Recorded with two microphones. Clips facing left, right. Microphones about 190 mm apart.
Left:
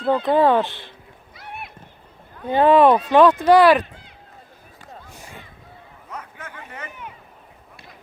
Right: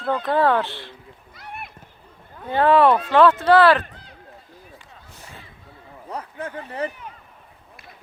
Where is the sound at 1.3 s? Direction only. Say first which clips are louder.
Left 1 dB; centre (ahead or behind).